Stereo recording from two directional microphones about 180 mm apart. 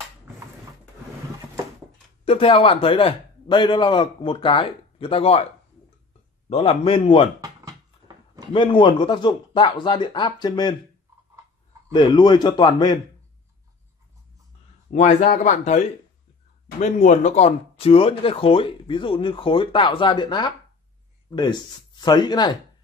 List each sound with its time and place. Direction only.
2.2 s speech: 30° left (ahead or behind)
6.5 s speech: 30° left (ahead or behind)
8.5 s speech: 25° left (ahead or behind)
11.9 s speech: 25° left (ahead or behind)
14.9 s speech: 40° left (ahead or behind)
16.8 s speech: 45° left (ahead or behind); by 22.6 s 25° left (ahead or behind)